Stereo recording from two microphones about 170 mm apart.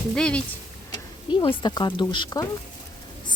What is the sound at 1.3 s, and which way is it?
Speech, 25° left (ahead or behind).